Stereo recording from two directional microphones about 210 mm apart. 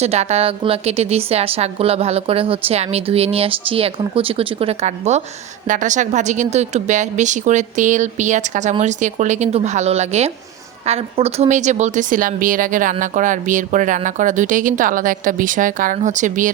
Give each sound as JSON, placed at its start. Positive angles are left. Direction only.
{"t": 0.0, "sound": "a woman's voice", "side_deg": -30}